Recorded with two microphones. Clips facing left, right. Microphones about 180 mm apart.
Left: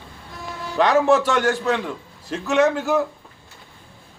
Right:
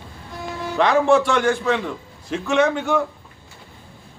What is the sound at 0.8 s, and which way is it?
A man's voice, centre (ahead or behind).